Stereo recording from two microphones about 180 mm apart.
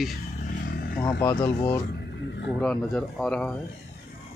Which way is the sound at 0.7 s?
60° left (ahead or behind).